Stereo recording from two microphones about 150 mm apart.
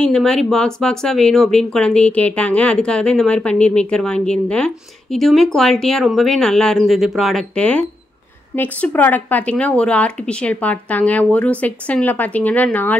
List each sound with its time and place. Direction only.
0.0 s speech: 5° left (ahead or behind)